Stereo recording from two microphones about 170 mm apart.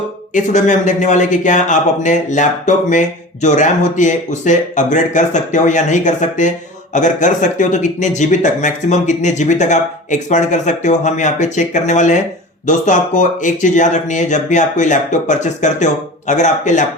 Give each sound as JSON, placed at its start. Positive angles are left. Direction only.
{"t": 0.3, "sound": "a man's voice", "side_deg": 45}